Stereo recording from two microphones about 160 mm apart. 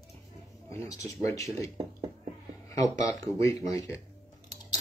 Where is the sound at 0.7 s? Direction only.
20° left (ahead or behind).